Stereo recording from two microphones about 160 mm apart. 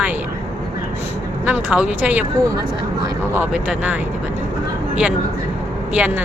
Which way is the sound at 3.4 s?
5° right (ahead or behind).